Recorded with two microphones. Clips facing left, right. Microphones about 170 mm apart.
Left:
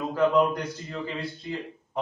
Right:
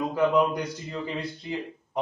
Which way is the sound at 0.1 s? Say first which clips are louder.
Left 2 dB; 10° right (ahead or behind).